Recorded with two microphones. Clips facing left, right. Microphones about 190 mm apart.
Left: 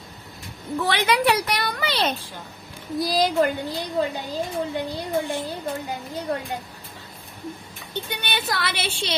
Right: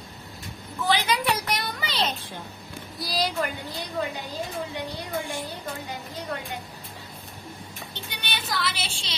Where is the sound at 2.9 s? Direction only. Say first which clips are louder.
Left 7 dB; 50° left (ahead or behind).